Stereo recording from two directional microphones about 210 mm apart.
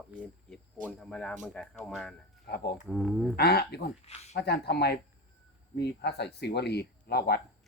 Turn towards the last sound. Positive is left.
turn(degrees=50)  # may be behind; listen again after turning